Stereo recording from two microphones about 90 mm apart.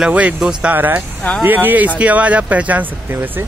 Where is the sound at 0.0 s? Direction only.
10° right (ahead or behind).